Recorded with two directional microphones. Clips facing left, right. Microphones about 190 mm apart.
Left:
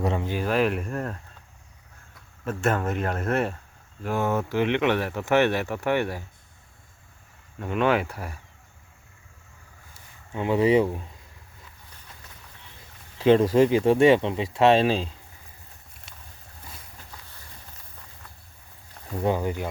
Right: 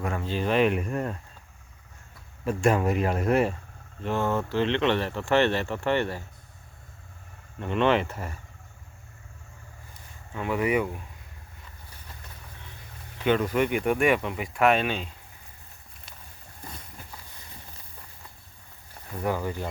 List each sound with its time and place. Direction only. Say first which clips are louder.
0.0 s speech: left 3 dB; 20° left (ahead or behind)
0.4 s speech: right 2 dB; centre (ahead or behind)
2.4 s speech: right 2 dB; centre (ahead or behind)
4.0 s speech: left 1 dB; 10° left (ahead or behind)
7.6 s speech: even; 5° left (ahead or behind)
10.3 s speech: left 5 dB; 25° left (ahead or behind)
13.1 s speech: left 6 dB; 30° left (ahead or behind)
19.2 s speech: left 3 dB; 20° left (ahead or behind)